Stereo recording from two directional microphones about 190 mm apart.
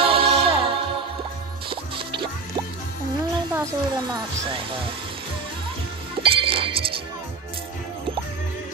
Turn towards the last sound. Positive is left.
turn(degrees=-25)  # may be behind; listen again after turning